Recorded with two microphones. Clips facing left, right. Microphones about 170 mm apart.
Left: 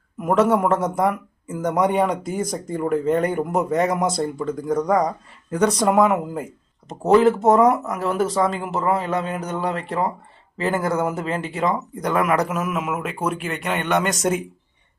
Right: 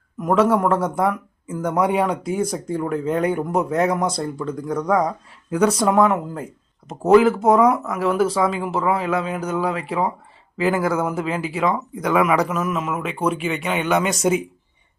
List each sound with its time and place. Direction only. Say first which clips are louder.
0.2 s speech: even; 5° left (ahead or behind)